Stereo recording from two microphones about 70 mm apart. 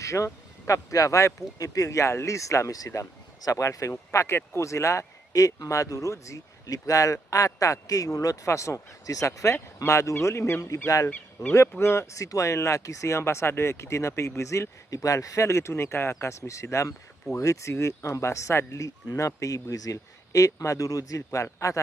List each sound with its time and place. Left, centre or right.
0.0 s a man's voice: left
11.1 s speech: left
11.8 s speech: left